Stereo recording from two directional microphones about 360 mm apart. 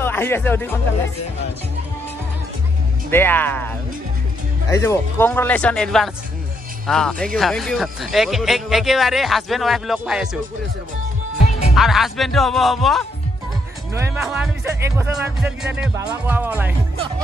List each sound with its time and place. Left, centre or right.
0.0 s speech: centre
3.1 s speech: centre
11.7 s speech: centre